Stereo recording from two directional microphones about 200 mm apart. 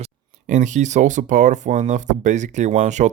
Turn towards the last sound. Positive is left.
turn(degrees=-35)  # may be behind; listen again after turning